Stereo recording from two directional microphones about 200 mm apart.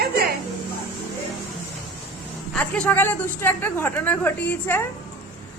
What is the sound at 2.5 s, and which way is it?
Speech, 10° left (ahead or behind).